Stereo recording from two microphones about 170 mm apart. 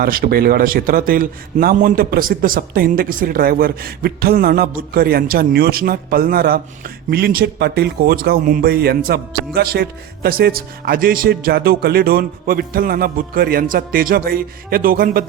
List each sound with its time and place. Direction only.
0.0 s a man's voice: 60° right (ahead or behind)